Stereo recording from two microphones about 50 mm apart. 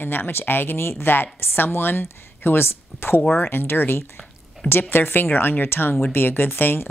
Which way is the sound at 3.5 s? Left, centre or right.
Left.